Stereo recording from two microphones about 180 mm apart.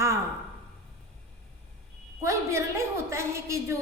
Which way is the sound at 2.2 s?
15° right (ahead or behind).